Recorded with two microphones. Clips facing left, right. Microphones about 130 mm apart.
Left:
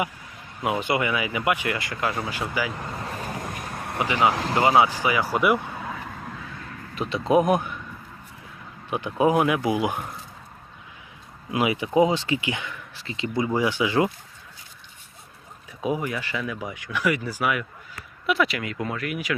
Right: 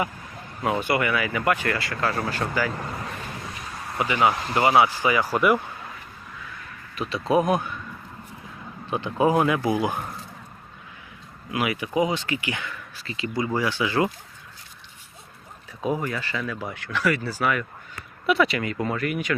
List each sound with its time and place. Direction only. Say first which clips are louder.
0.6 s speech: right 1 dB; 15° left (ahead or behind)
3.0 s vehicle: left 3 dB; 40° left (ahead or behind)
4.1 s speech: even; 15° left (ahead or behind)
5.8 s a sound: left 7 dB; 85° left
6.9 s speech: left 2 dB; 25° left (ahead or behind)
8.9 s speech: even; 15° left (ahead or behind)
11.5 s speech: left 3 dB; 25° left (ahead or behind)
15.8 s speech: even; 10° left (ahead or behind)
18.3 s speech: right 2 dB; centre (ahead or behind)